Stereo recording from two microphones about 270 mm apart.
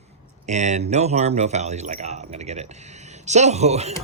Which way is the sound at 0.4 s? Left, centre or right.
Right.